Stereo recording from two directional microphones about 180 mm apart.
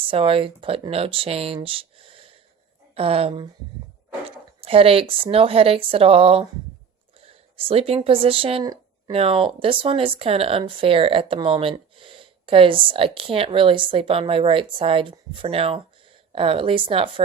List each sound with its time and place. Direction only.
0.1 s speech: 30° right (ahead or behind)